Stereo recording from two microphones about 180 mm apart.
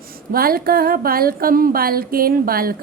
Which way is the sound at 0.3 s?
55° right (ahead or behind).